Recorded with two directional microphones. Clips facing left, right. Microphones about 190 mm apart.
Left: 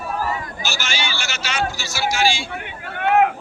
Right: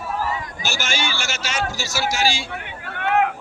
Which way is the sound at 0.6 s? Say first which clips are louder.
Right 3 dB; 50° right (ahead or behind).